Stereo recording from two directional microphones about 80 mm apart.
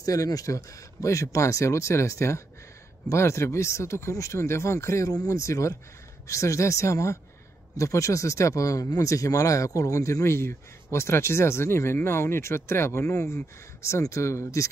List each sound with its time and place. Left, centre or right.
0.0 s speech: left